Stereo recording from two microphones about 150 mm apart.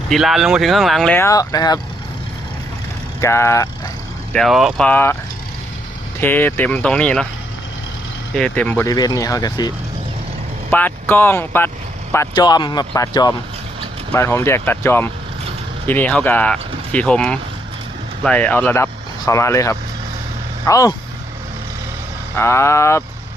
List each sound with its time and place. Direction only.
0.1 s speech: centre (ahead or behind)
1.2 s speech: 20° left (ahead or behind)
3.2 s speech: 20° left (ahead or behind)
4.3 s speech: centre (ahead or behind)
4.9 s speech: 15° left (ahead or behind)
6.1 s speech: 15° left (ahead or behind)
8.4 s speech: 5° left (ahead or behind)
8.9 s speech: 25° left (ahead or behind)
10.7 s speech: 10° left (ahead or behind)
12.3 s speech: 30° left (ahead or behind)
22.4 s speech: 15° left (ahead or behind)